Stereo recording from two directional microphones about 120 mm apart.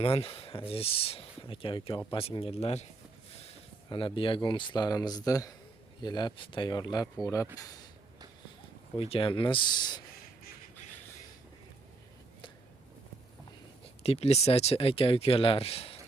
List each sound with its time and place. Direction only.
0.0 s speech: 50° left (ahead or behind)
3.8 s speech: 45° left (ahead or behind)
9.0 s speech: 50° left (ahead or behind)
14.0 s speech: 55° left (ahead or behind)